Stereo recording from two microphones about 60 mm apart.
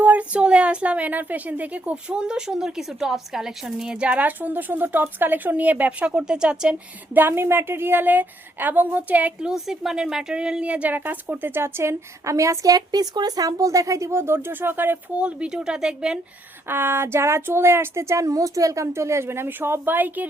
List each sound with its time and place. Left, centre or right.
0.0 s speech: right
6.1 s speech: centre
7.1 s a woman's voice: right
9.5 s a woman's voice: centre; by 14.9 s right
15.2 s speech: centre
16.6 s speech: right